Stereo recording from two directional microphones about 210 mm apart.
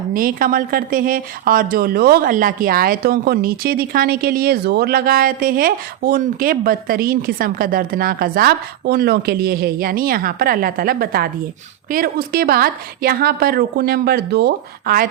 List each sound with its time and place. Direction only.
0.1 s speech: 40° right (ahead or behind)